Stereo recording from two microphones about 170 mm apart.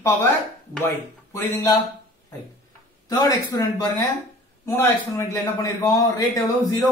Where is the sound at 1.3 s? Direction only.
20° left (ahead or behind).